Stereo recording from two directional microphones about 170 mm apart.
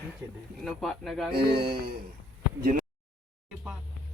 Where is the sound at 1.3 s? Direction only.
65° right (ahead or behind).